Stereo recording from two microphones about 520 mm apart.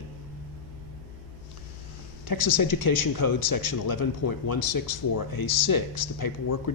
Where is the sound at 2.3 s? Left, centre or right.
Left.